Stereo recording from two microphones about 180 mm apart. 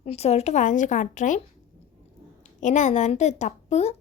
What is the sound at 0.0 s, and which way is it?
A woman's voice, 35° left (ahead or behind).